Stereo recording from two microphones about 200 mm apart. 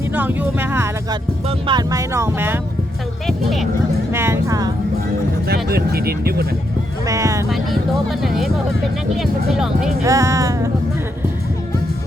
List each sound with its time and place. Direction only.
0.1 s speech: 10° right (ahead or behind)
1.5 s speech: 25° right (ahead or behind)
3.2 s speech: centre (ahead or behind)
4.1 s speech: 10° right (ahead or behind)
5.6 s speech: 50° right (ahead or behind)
7.1 s speech: 15° right (ahead or behind)
8.2 s speech: centre (ahead or behind)
10.0 s speech: 15° right (ahead or behind)